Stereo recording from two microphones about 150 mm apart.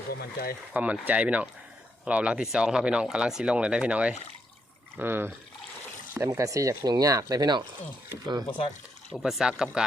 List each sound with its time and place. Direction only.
0.1 s speech: 80° left
0.7 s speech: 10° right (ahead or behind); by 7.6 s 25° right (ahead or behind)
8.4 s speech: 35° left (ahead or behind)
9.1 s speech: centre (ahead or behind)